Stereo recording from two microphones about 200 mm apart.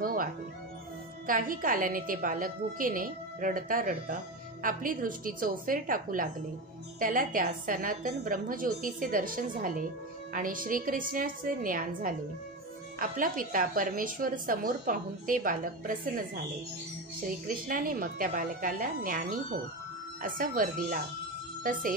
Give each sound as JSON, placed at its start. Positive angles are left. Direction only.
{"t": 0.0, "sound": "music", "side_deg": -45}
{"t": 1.2, "sound": "a woman's voice", "side_deg": -45}
{"t": 17.6, "sound": "a woman's voice", "side_deg": -45}